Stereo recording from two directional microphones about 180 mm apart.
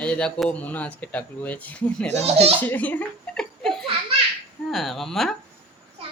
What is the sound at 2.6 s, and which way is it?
Speech, 10° left (ahead or behind).